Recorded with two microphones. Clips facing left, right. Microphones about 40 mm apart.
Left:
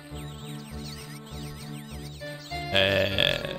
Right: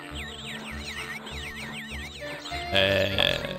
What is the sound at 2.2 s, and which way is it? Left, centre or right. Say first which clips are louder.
Music: right 1 dB; right.